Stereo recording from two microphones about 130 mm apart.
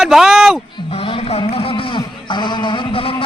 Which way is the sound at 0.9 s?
45° left (ahead or behind).